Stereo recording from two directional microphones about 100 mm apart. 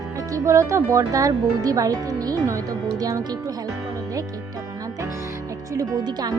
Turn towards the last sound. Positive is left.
turn(degrees=-45)  # may be behind; listen again after turning